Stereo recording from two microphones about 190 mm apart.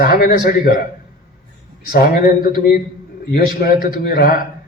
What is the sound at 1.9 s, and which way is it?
Speech, 50° left (ahead or behind).